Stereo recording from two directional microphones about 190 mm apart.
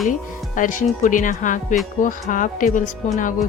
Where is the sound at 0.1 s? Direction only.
45° left (ahead or behind).